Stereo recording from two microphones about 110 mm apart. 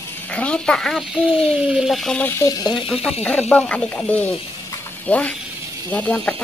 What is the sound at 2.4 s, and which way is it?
Speech, 35° left (ahead or behind).